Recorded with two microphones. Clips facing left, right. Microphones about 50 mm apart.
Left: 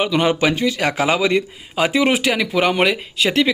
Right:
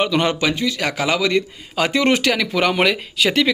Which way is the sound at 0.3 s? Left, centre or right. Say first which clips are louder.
Left 2 dB; left.